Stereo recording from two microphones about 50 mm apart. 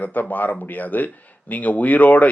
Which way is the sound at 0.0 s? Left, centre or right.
Left.